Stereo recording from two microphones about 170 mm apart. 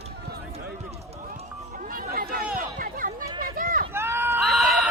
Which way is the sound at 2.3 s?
55° right (ahead or behind).